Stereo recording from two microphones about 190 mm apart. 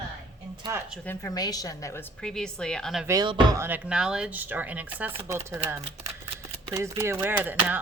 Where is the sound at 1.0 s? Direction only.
15° left (ahead or behind).